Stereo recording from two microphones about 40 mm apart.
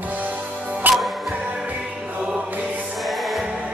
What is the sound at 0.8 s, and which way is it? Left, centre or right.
Music, right.